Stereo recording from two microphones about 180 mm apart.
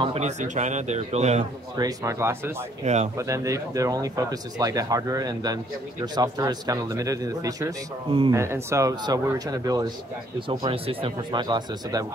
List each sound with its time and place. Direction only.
0.0 s a man's voice: 35° right (ahead or behind)
1.8 s speech: 20° right (ahead or behind)
2.8 s a man's voice: 40° right (ahead or behind)
3.2 s speech: 15° right (ahead or behind)